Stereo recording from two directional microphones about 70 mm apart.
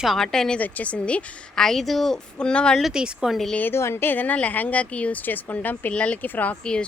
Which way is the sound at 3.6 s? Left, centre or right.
Left.